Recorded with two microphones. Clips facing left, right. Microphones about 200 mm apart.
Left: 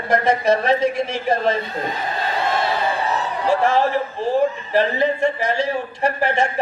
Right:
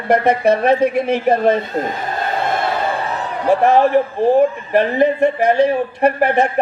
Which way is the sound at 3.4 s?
60° right (ahead or behind).